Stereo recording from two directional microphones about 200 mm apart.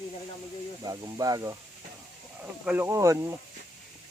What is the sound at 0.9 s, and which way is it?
Speech, 15° right (ahead or behind).